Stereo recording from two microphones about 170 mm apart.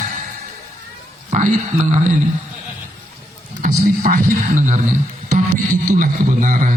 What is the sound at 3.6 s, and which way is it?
A man's voice, 50° right (ahead or behind).